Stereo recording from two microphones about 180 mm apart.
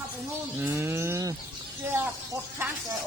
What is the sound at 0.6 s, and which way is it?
Livestock, 15° right (ahead or behind).